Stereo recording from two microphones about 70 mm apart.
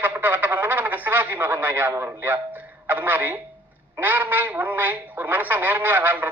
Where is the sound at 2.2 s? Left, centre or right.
Right.